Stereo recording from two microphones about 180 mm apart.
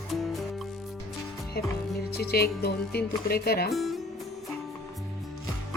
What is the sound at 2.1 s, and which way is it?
Speech, 60° left (ahead or behind).